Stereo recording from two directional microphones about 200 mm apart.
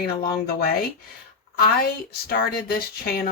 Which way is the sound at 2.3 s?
50° left (ahead or behind).